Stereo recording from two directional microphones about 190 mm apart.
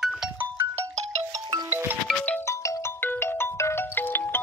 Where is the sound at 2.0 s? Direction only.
5° left (ahead or behind).